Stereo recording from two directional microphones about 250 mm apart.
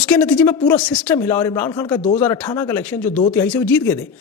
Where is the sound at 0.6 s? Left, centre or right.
Centre.